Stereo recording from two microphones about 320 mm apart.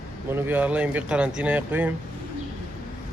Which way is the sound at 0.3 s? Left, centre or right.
Centre.